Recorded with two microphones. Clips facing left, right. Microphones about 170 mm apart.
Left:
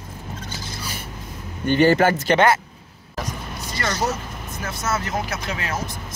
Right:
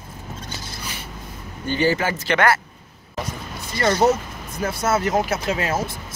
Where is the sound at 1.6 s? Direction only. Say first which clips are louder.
Left 5 dB; 60° left (ahead or behind).